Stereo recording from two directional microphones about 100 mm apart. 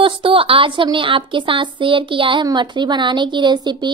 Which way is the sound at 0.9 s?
60° right (ahead or behind).